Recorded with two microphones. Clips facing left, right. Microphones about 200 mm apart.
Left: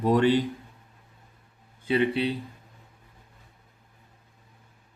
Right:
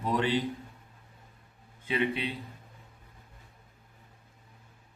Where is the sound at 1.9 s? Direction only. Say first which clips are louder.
Left 6 dB; 35° left (ahead or behind).